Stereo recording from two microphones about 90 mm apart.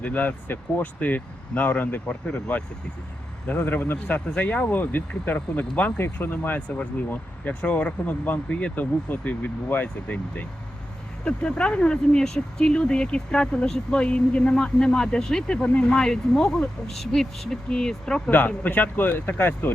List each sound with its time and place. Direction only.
0.0 s speech: 20° left (ahead or behind)
18.3 s speech: 20° left (ahead or behind)